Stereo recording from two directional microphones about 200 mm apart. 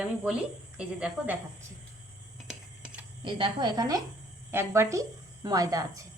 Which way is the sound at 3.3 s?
25° right (ahead or behind).